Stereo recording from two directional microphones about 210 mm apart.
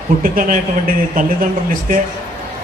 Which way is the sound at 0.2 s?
40° right (ahead or behind).